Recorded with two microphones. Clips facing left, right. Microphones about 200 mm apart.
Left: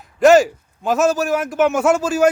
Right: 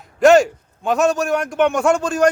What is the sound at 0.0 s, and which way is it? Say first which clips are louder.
A man's voice: even; centre (ahead or behind).